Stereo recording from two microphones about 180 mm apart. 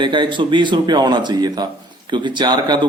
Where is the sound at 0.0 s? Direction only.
25° right (ahead or behind).